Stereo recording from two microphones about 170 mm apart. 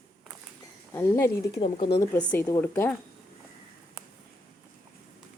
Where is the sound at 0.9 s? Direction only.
15° left (ahead or behind).